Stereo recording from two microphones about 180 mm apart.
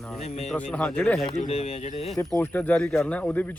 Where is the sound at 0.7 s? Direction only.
5° left (ahead or behind).